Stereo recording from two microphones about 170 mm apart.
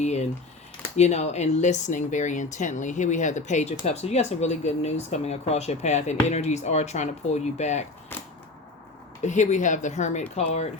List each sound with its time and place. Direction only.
0.0 s typing: 40° left (ahead or behind)
0.9 s speech: 40° left (ahead or behind)
8.1 s a sound: 10° left (ahead or behind)
9.2 s speech: 45° left (ahead or behind)